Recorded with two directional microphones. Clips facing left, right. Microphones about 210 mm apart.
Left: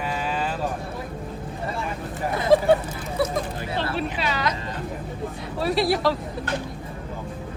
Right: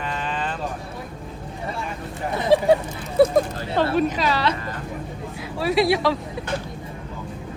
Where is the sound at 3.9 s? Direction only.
40° right (ahead or behind).